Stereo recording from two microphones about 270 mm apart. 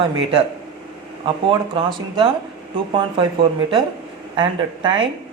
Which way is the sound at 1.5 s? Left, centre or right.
Centre.